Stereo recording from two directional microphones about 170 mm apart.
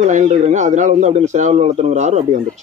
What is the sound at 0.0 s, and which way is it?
Speech, 45° right (ahead or behind).